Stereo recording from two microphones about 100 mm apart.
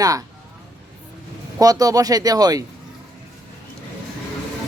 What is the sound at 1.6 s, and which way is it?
Speech, 40° right (ahead or behind).